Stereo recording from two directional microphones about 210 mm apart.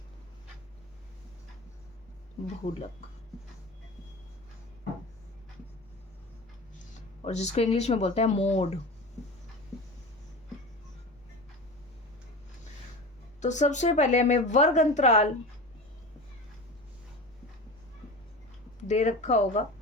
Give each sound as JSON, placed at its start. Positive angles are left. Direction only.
{"t": 7.3, "sound": "a woman's voice", "side_deg": 30}
{"t": 13.4, "sound": "a woman's voice", "side_deg": 35}
{"t": 18.9, "sound": "a woman's voice", "side_deg": 35}